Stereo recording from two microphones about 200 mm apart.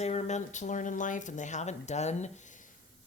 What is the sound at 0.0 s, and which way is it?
Speech, 35° left (ahead or behind).